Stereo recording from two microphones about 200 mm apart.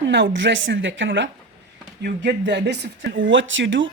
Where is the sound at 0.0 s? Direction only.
65° right (ahead or behind).